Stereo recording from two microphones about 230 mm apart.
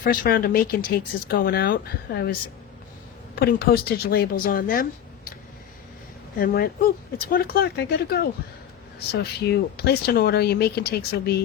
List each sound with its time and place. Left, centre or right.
0.0 s speech: left
3.7 s speech: left
6.4 s speech: left